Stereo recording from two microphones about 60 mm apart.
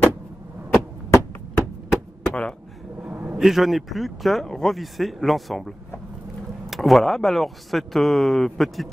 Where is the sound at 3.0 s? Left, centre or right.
Right.